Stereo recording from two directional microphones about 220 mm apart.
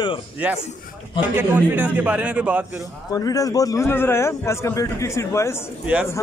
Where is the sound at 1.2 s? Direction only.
10° right (ahead or behind).